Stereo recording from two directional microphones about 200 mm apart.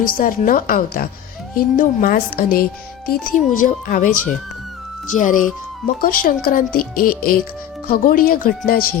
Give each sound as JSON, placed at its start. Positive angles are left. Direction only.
{"t": 0.0, "sound": "speech", "side_deg": 45}